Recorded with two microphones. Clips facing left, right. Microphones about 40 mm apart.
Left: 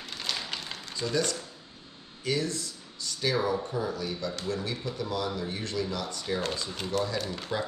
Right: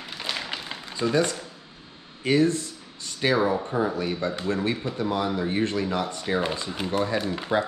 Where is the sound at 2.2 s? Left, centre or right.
Right.